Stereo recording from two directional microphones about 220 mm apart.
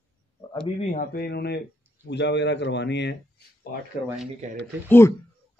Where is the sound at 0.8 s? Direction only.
35° left (ahead or behind); by 3.1 s 50° left (ahead or behind).